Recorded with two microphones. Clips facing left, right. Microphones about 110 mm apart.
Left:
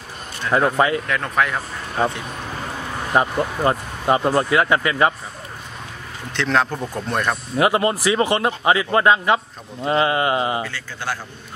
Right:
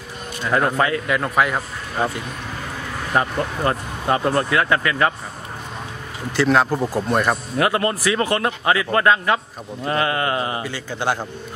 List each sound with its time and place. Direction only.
0.5 s speech: 5° left (ahead or behind)
1.0 s speech: 5° right (ahead or behind)
3.1 s speech: 15° left (ahead or behind)
6.3 s speech: 5° right (ahead or behind)
7.5 s speech: 15° left (ahead or behind)
10.6 s a man's voice: 15° right (ahead or behind)